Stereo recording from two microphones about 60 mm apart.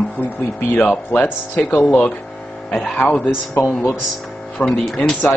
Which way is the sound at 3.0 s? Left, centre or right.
Left.